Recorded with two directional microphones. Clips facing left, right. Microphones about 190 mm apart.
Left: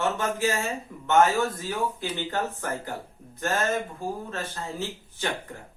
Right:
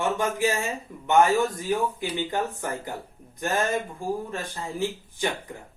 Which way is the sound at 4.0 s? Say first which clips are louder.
Right 2 dB; 15° right (ahead or behind).